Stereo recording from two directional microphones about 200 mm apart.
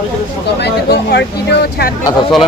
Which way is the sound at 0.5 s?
55° left (ahead or behind).